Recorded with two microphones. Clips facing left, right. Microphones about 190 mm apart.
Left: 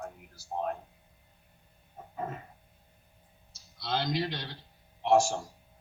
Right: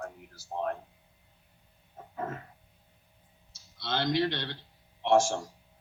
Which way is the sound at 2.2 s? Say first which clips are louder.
Right 1 dB; 60° right (ahead or behind).